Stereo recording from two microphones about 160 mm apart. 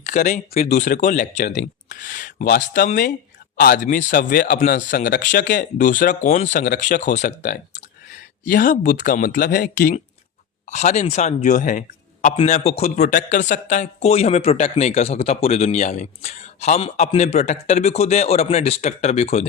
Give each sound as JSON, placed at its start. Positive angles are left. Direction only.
{"t": 0.0, "sound": "speech", "side_deg": 50}
{"t": 1.5, "sound": "speech", "side_deg": 90}
{"t": 2.0, "sound": "speech", "side_deg": 55}
{"t": 8.4, "sound": "speech", "side_deg": 60}
{"t": 10.7, "sound": "speech", "side_deg": 50}
{"t": 12.5, "sound": "speech", "side_deg": 40}